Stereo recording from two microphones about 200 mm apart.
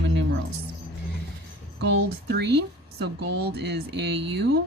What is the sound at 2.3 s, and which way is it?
Speech, 55° right (ahead or behind).